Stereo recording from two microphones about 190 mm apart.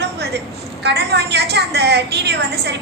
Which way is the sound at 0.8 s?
60° right (ahead or behind).